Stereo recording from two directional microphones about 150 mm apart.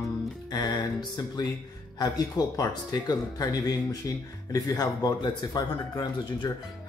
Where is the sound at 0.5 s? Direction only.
30° left (ahead or behind).